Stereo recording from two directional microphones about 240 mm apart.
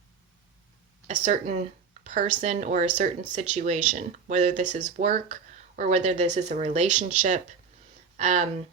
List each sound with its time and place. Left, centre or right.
1.0 s speech: right